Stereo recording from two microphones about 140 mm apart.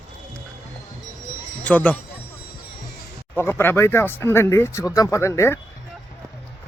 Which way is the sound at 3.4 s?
15° left (ahead or behind).